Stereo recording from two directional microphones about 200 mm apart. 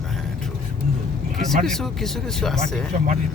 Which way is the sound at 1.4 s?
Centre (ahead or behind).